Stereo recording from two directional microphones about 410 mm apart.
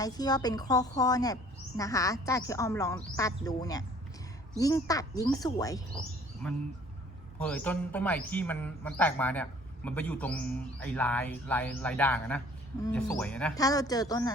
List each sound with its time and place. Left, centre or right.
0.0 s a woman's voice: centre